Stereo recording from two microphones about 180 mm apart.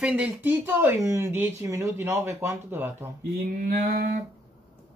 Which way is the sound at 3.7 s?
55° right (ahead or behind).